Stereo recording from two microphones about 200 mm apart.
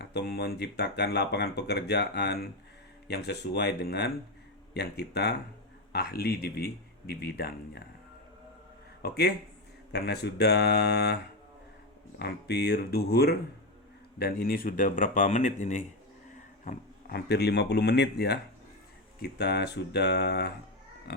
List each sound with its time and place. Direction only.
0.0 s speech: 55° left (ahead or behind)
9.0 s speech: 50° left (ahead or behind)
12.2 s speech: 55° left (ahead or behind); by 15.5 s 40° left (ahead or behind)
16.6 s speech: 50° left (ahead or behind)